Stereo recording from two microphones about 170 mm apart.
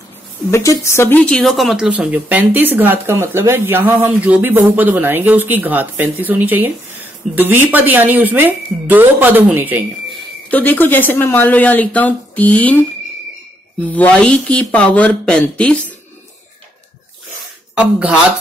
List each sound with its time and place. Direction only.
0.5 s speech: 15° left (ahead or behind); by 9.8 s 10° right (ahead or behind)
10.5 s speech: 10° left (ahead or behind)
13.8 s speech: 10° left (ahead or behind)
17.7 s speech: 5° right (ahead or behind)